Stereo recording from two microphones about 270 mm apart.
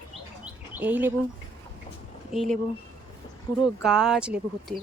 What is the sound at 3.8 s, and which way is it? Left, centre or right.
Speech, centre.